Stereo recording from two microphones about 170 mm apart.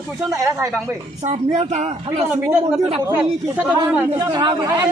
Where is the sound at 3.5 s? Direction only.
10° right (ahead or behind).